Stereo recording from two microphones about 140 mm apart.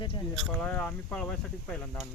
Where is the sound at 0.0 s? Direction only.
35° left (ahead or behind).